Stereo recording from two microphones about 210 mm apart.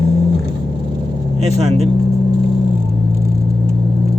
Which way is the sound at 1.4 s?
30° right (ahead or behind).